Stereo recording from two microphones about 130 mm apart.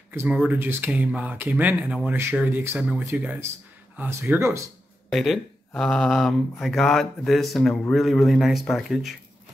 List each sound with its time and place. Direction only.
0.1 s speech: 15° right (ahead or behind)
5.1 s speech: centre (ahead or behind)